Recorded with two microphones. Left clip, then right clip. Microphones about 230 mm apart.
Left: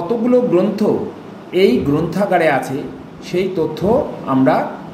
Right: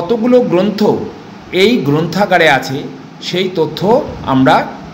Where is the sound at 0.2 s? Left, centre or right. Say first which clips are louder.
Right 3 dB; centre.